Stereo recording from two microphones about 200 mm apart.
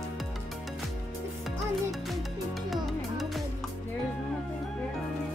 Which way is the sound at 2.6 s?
Centre (ahead or behind).